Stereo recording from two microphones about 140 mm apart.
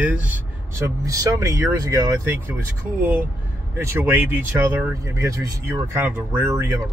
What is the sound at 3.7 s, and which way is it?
Speech, 15° right (ahead or behind).